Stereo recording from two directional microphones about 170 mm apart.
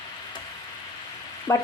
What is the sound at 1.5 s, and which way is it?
Speech, 15° left (ahead or behind).